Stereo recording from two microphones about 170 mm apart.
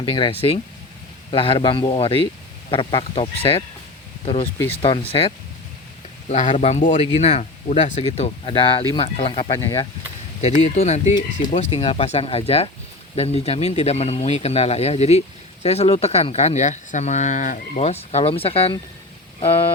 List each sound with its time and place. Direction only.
0.0 s speech: 30° left (ahead or behind)
4.7 s speech: 35° left (ahead or behind)